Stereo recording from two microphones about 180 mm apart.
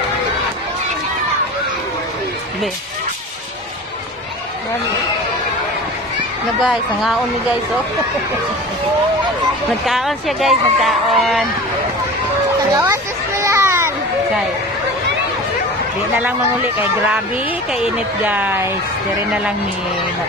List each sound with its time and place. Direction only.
6.7 s speech: centre (ahead or behind)
9.8 s speech: centre (ahead or behind)
12.7 s a sound: 15° right (ahead or behind)
17.7 s speech: 10° right (ahead or behind)